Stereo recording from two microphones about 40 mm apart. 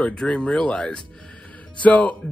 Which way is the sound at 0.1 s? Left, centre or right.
Left.